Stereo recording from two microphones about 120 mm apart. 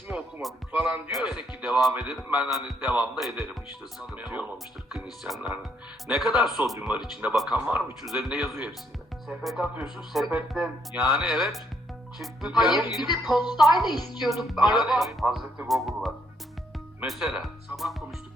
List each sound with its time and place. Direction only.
0.1 s music: 10° right (ahead or behind)
0.4 s a man's voice: 5° right (ahead or behind)
7.6 s a man's voice: 15° right (ahead or behind)
8.0 s speech: centre (ahead or behind)
13.8 s a woman's voice: 35° left (ahead or behind)
14.2 s speech: centre (ahead or behind)